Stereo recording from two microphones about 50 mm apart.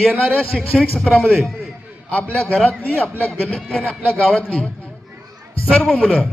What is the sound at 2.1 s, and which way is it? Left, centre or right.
Speech, left.